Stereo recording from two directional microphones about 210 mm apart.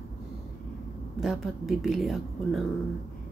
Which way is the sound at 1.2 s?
Centre (ahead or behind).